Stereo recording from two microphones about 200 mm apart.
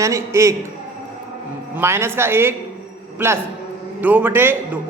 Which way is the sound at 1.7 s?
10° right (ahead or behind).